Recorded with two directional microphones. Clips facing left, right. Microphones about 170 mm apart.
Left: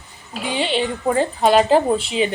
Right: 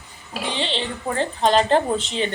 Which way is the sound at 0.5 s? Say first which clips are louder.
Left 7 dB; 10° left (ahead or behind).